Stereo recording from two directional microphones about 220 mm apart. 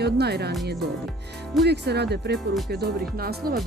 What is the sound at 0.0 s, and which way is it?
Speech, 45° right (ahead or behind).